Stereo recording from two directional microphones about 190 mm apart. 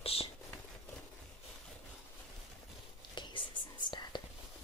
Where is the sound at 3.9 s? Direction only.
45° left (ahead or behind).